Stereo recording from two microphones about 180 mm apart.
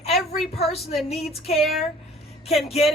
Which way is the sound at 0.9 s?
Centre (ahead or behind).